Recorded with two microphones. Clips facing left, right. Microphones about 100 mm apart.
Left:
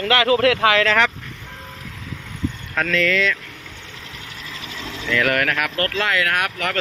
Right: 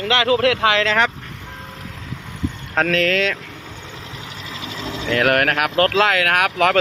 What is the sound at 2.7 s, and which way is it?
Speech, 50° right (ahead or behind).